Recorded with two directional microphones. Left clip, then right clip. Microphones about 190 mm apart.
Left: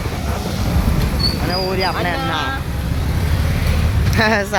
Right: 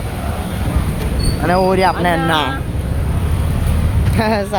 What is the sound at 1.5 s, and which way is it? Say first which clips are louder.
Speech: right 10 dB; 30° right (ahead or behind).